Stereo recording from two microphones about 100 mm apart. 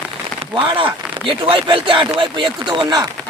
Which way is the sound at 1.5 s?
60° right (ahead or behind).